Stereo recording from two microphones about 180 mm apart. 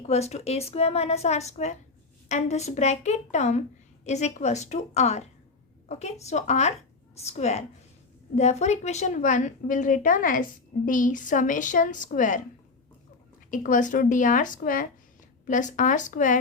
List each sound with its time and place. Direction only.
0.1 s a woman's voice: 35° left (ahead or behind)
13.5 s a woman's voice: 45° left (ahead or behind)